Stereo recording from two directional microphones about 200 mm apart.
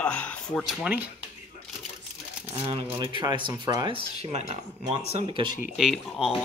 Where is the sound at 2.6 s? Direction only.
30° right (ahead or behind).